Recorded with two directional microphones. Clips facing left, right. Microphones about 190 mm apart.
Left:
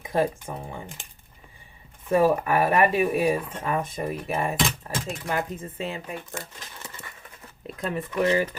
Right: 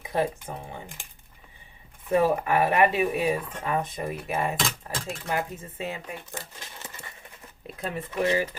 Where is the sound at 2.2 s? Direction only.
35° left (ahead or behind).